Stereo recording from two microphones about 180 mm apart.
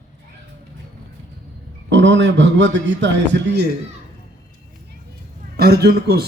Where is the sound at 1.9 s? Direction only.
90° right.